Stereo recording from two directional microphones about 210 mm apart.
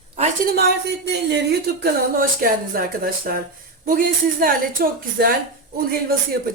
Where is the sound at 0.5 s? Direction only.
50° right (ahead or behind).